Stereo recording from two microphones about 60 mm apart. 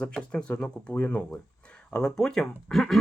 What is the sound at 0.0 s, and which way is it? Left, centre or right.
Speech, centre.